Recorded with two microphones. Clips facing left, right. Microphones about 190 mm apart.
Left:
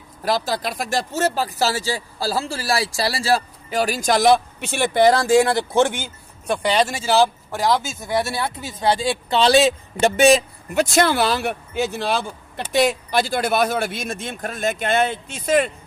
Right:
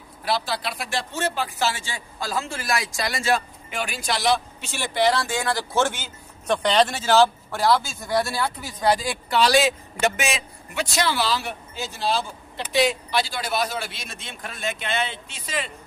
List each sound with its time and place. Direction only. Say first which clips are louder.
0.2 s speech: left 4 dB; 45° left (ahead or behind)